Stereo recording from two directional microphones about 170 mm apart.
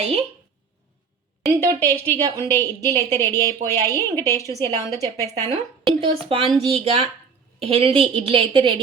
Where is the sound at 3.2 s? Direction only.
15° left (ahead or behind).